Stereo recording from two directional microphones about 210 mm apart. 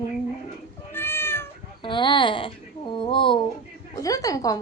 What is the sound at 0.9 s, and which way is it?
Cat, 10° left (ahead or behind).